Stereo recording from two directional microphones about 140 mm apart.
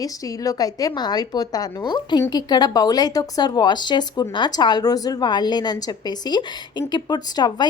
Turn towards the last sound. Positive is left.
turn(degrees=30)  # may be behind; listen again after turning